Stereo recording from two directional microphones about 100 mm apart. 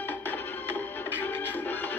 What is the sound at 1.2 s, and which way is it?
Music, 20° left (ahead or behind).